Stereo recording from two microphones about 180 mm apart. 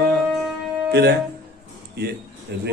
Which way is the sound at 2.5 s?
70° right (ahead or behind).